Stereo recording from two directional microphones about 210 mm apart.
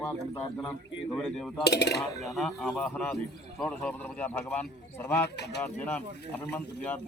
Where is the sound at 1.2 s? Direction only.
Centre (ahead or behind).